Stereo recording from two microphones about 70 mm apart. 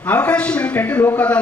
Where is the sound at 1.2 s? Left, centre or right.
Centre.